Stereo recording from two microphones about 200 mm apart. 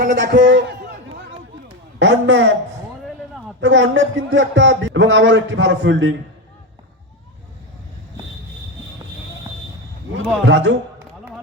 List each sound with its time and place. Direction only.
0.0 s speech: 40° right (ahead or behind)
0.3 s a man's voice: 65° right (ahead or behind)
2.0 s a man's voice: 65° right (ahead or behind)
3.6 s a man's voice: 65° right (ahead or behind)
10.4 s a man's voice: 65° right (ahead or behind)